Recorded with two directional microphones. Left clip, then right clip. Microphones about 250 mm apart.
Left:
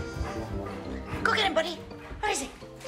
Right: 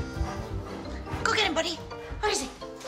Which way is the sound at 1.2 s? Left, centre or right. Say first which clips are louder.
Even; centre.